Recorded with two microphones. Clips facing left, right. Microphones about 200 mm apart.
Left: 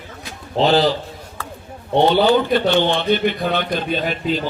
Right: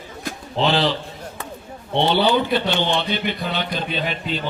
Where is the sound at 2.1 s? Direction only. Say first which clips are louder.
Left 3 dB; 45° left (ahead or behind).